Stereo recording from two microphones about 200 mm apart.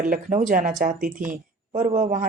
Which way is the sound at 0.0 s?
40° right (ahead or behind).